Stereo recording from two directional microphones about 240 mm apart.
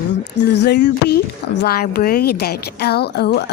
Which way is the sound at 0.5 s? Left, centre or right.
Left.